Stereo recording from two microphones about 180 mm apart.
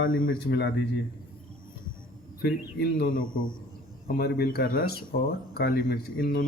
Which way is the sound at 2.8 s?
55° left (ahead or behind).